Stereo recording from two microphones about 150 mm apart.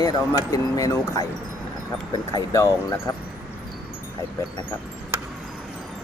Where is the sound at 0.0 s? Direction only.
25° left (ahead or behind).